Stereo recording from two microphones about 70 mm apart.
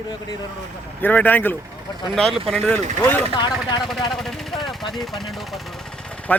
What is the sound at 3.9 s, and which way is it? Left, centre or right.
Speech, centre.